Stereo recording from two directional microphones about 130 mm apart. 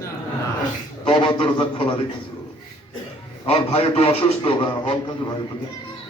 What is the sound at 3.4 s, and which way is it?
Speech, 50° left (ahead or behind).